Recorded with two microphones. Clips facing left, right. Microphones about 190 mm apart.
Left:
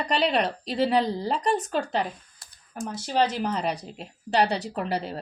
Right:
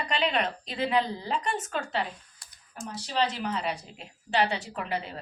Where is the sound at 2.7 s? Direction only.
50° left (ahead or behind).